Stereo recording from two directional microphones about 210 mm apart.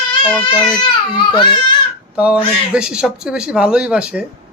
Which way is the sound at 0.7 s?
20° left (ahead or behind).